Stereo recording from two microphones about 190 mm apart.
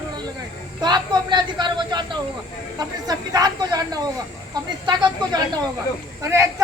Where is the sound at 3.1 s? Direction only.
20° right (ahead or behind).